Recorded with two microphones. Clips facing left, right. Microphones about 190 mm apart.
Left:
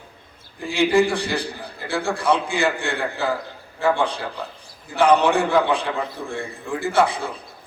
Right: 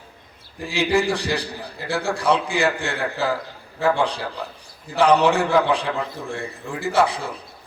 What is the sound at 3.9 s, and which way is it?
A man's voice, 55° left (ahead or behind).